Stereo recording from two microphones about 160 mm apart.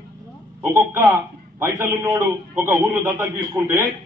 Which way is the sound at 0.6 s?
15° right (ahead or behind).